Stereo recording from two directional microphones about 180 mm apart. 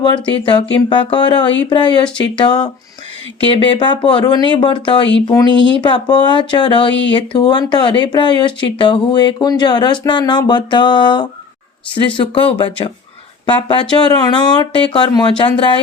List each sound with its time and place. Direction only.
0.0 s speech: 25° left (ahead or behind)
5.5 s speech: 85° left
5.8 s speech: 25° left (ahead or behind)